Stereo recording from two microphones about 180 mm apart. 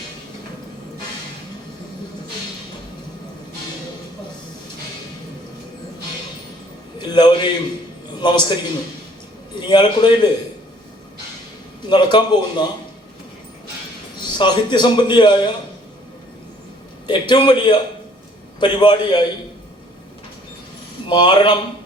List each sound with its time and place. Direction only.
7.0 s a sound: 25° left (ahead or behind)
8.2 s a man's voice: 25° left (ahead or behind)
9.6 s a man's voice: 25° left (ahead or behind)
11.9 s a man's voice: 25° left (ahead or behind)
14.3 s a man's voice: 25° left (ahead or behind)
17.1 s a man's voice: 25° left (ahead or behind)
21.1 s a man's voice: 25° left (ahead or behind)